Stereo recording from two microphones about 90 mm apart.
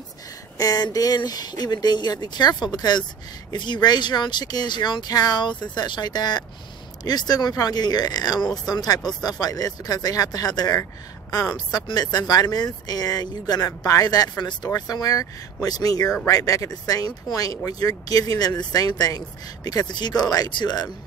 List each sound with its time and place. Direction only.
0.6 s speech: 45° left (ahead or behind)
10.8 s speech: 35° left (ahead or behind)
11.5 s speech: 50° left (ahead or behind)